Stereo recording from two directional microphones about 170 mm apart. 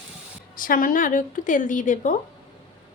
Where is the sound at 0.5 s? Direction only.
55° left (ahead or behind).